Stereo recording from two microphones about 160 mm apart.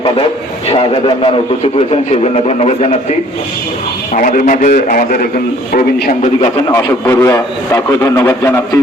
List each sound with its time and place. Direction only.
0.7 s a man's voice: 35° left (ahead or behind)
4.1 s a man's voice: 55° left (ahead or behind)
5.7 s a man's voice: 50° left (ahead or behind)
6.7 s a man's voice: 20° left (ahead or behind)